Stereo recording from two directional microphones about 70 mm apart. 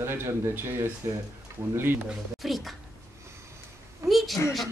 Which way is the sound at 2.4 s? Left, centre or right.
Centre.